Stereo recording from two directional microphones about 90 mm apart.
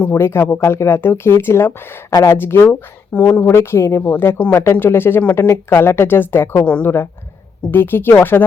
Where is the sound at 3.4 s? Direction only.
30° left (ahead or behind).